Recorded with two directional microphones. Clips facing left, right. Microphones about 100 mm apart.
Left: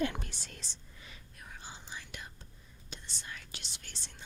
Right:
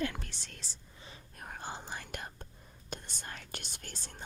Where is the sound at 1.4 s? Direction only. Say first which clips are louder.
Right 8 dB; 55° right (ahead or behind).